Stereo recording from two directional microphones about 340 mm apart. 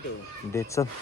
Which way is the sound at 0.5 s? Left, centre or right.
Centre.